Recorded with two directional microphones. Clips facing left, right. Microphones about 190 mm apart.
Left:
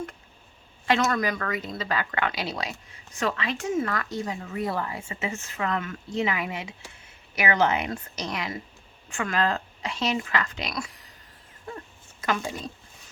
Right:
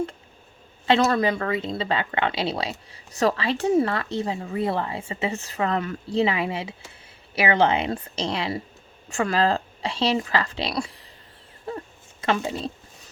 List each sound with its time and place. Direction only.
0.9 s speech: 30° right (ahead or behind)
12.2 s speech: 25° right (ahead or behind)